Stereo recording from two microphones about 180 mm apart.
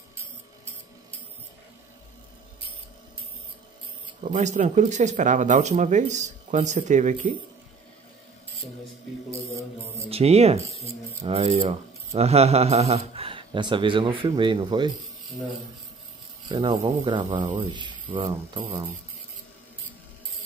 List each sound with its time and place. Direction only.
4.2 s speech: 40° right (ahead or behind)
10.0 s speech: 35° right (ahead or behind)
16.4 s speech: 25° right (ahead or behind)